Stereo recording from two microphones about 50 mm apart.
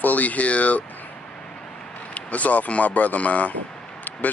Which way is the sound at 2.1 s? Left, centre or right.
Left.